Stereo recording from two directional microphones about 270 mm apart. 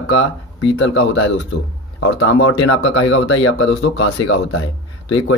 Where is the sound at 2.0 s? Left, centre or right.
Left.